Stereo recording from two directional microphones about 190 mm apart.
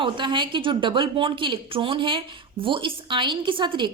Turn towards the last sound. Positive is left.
turn(degrees=-25)  # may be behind; listen again after turning